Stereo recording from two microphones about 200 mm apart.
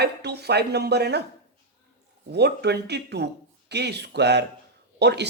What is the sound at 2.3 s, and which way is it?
Speech, 55° right (ahead or behind).